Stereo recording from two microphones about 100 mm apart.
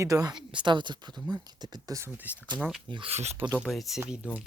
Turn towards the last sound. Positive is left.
turn(degrees=-15)  # may be behind; listen again after turning